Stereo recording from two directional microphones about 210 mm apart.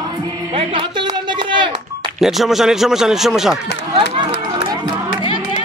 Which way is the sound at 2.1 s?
Centre (ahead or behind).